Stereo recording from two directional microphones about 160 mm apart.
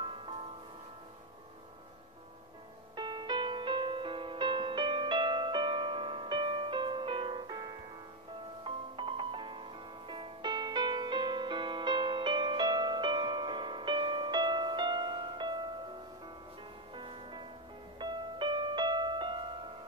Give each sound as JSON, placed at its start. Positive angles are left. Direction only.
{"t": 3.0, "sound": "music", "side_deg": -30}
{"t": 16.9, "sound": "music", "side_deg": -30}